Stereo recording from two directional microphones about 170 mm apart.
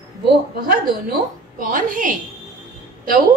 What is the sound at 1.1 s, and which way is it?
A woman's voice, 50° right (ahead or behind).